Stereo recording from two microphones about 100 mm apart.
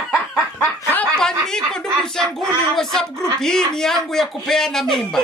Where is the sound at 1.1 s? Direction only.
5° left (ahead or behind).